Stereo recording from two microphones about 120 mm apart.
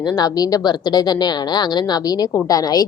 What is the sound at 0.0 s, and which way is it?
A woman's voice, 35° left (ahead or behind).